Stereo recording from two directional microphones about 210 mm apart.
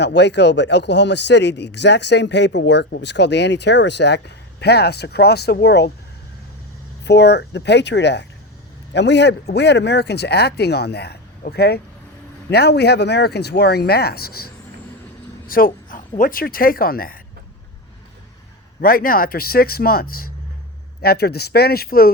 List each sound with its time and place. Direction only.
0.0 s speech: 55° left (ahead or behind)
7.0 s speech: 55° left (ahead or behind)
18.8 s speech: 45° left (ahead or behind)